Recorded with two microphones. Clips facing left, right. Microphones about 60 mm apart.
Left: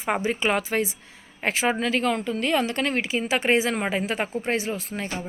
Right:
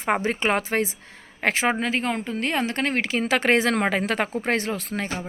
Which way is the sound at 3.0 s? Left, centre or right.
Right.